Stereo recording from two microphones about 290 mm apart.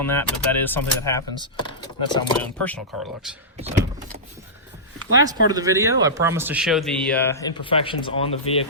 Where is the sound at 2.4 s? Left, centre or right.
Centre.